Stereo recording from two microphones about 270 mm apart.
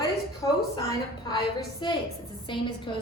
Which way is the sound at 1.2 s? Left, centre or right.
Centre.